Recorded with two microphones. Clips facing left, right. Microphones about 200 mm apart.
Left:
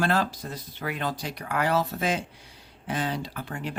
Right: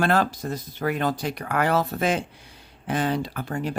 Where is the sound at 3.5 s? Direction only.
40° right (ahead or behind).